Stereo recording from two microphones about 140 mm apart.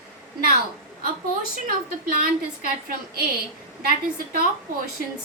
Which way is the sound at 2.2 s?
85° right.